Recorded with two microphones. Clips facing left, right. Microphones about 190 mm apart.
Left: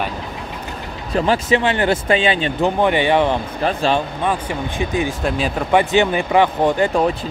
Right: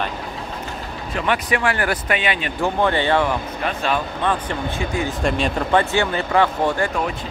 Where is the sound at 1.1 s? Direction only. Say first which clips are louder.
Left 5 dB; 30° left (ahead or behind).